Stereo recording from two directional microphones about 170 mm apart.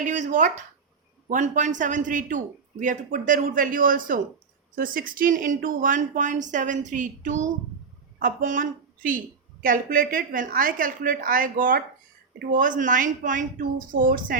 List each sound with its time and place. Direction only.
0.0 s a man's voice: 45° right (ahead or behind)